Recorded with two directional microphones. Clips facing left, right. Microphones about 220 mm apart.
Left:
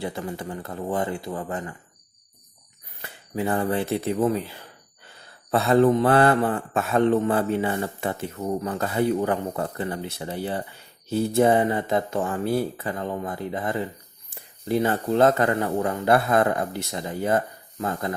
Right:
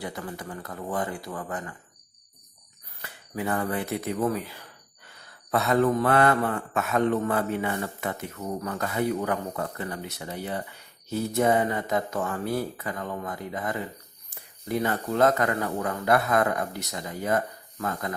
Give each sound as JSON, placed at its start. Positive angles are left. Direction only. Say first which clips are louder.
{"t": 0.0, "sound": "speech", "louder": "left 5 dB", "side_deg": 25}
{"t": 3.0, "sound": "speech", "louder": "left 4 dB", "side_deg": 25}